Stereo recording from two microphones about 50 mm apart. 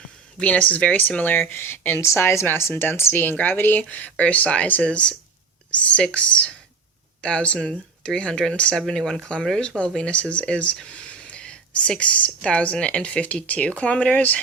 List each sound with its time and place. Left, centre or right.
0.3 s speech: left
10.8 s a sound: left
12.4 s speech: left